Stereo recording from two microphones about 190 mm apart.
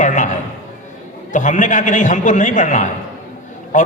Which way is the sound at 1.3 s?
40° left (ahead or behind).